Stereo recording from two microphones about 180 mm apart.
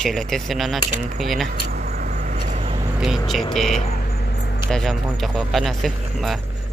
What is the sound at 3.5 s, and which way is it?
Speech, centre (ahead or behind).